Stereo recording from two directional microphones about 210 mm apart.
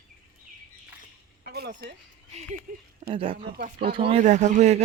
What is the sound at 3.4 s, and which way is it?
Speech, 45° right (ahead or behind).